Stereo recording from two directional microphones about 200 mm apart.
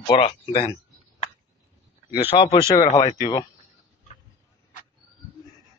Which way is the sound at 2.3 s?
35° left (ahead or behind).